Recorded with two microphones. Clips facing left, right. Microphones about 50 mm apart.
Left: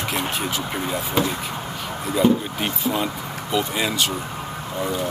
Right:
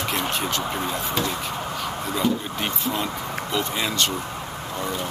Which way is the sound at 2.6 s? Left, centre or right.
Centre.